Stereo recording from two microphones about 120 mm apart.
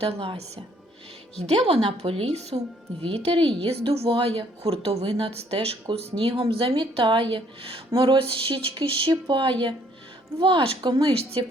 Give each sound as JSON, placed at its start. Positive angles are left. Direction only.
{"t": 0.0, "sound": "a woman's voice", "side_deg": -50}
{"t": 3.1, "sound": "a woman's voice", "side_deg": -50}
{"t": 7.9, "sound": "a sound", "side_deg": -35}
{"t": 8.2, "sound": "a woman's voice", "side_deg": -45}